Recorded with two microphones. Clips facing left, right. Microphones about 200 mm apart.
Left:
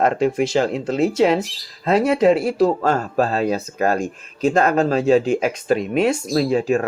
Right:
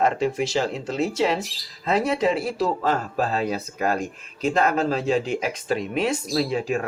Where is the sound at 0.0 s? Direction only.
55° left (ahead or behind).